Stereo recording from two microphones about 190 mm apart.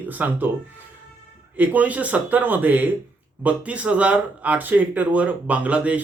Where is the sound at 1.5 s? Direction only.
10° right (ahead or behind).